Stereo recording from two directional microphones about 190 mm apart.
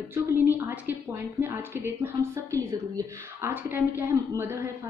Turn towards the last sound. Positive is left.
turn(degrees=-15)  # may be behind; listen again after turning